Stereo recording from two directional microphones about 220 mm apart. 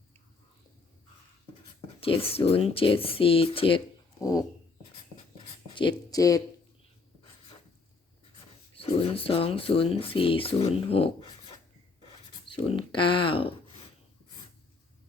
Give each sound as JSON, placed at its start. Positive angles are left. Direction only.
{"t": 2.0, "sound": "speech", "side_deg": 25}
{"t": 4.2, "sound": "a sound", "side_deg": 15}
{"t": 5.7, "sound": "speech", "side_deg": 20}
{"t": 8.7, "sound": "speech", "side_deg": 25}
{"t": 12.5, "sound": "speech", "side_deg": 20}